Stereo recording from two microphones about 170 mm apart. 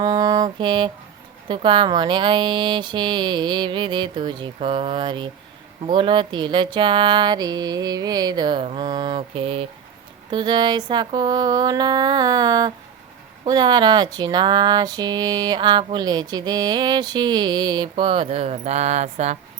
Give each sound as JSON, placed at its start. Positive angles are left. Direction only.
{"t": 0.0, "sound": "mantra", "side_deg": -20}
{"t": 1.5, "sound": "speech", "side_deg": -30}